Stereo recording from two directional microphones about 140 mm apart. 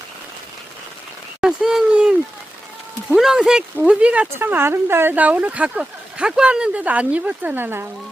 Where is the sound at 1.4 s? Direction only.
5° right (ahead or behind).